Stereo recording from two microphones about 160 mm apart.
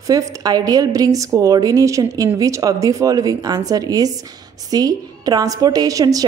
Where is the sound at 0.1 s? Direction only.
25° right (ahead or behind).